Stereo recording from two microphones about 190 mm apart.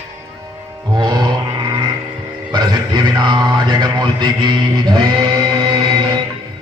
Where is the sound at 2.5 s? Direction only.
20° right (ahead or behind).